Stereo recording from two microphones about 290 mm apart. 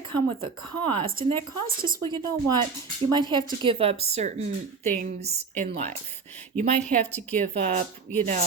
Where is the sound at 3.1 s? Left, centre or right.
Centre.